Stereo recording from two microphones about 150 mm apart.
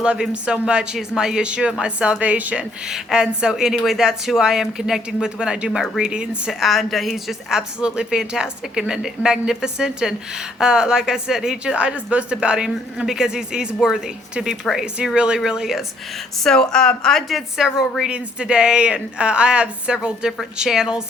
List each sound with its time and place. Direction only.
0.0 s speech: 5° right (ahead or behind)